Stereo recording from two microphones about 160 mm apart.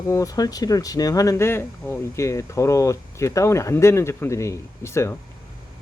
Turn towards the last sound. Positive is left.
turn(degrees=15)  # may be behind; listen again after turning